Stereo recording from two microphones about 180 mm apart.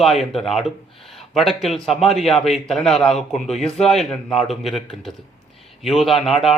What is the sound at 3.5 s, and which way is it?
Speech, 35° left (ahead or behind).